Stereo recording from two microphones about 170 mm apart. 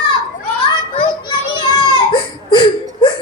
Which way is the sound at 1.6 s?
25° left (ahead or behind).